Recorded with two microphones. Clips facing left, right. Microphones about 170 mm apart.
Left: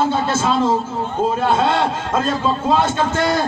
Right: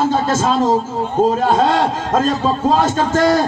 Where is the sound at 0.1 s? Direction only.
40° right (ahead or behind).